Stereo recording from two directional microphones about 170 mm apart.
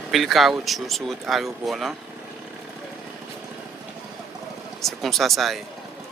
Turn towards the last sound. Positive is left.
turn(degrees=0)  # may be behind; listen again after turning